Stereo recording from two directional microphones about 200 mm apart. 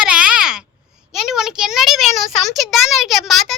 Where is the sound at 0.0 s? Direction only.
5° right (ahead or behind).